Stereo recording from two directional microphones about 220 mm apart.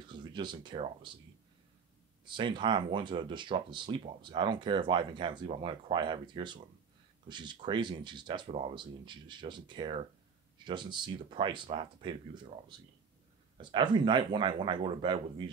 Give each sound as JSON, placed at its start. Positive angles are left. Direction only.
{"t": 0.1, "sound": "speech", "side_deg": -20}
{"t": 2.2, "sound": "speech", "side_deg": -20}
{"t": 13.6, "sound": "speech", "side_deg": -20}